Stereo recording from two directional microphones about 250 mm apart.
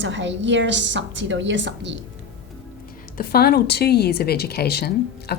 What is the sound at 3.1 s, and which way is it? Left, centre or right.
Speech, left.